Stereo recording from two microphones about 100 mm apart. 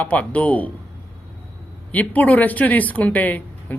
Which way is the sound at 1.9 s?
15° left (ahead or behind).